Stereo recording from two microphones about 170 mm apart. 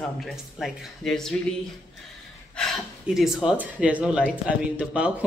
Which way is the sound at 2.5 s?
Centre (ahead or behind).